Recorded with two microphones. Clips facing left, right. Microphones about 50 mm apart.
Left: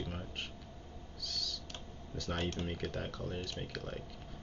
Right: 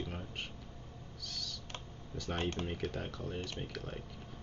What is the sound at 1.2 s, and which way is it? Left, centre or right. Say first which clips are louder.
Owl: left 3 dB; centre.